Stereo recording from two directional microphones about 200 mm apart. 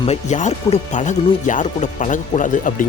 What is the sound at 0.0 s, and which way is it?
Speech, 35° left (ahead or behind).